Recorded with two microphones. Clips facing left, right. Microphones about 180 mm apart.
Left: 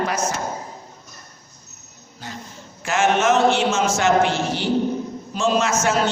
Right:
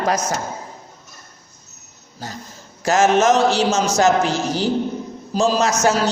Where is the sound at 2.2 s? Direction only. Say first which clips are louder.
Right 3 dB; 40° right (ahead or behind).